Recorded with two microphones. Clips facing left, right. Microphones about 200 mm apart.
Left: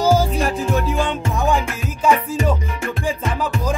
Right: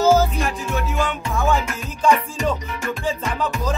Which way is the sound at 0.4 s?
35° left (ahead or behind).